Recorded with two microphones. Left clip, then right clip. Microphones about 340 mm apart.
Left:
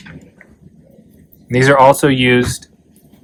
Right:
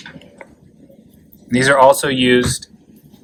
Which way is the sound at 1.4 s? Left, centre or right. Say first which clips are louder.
Left 2 dB; centre.